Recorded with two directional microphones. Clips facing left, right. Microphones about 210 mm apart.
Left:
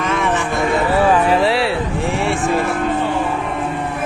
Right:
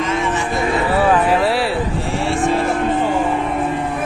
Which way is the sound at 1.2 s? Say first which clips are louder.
Left 1 dB; centre (ahead or behind).